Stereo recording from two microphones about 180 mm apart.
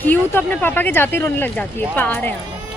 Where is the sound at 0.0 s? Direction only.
10° left (ahead or behind).